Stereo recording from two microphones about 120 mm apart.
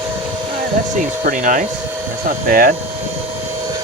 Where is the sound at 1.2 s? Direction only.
90° right.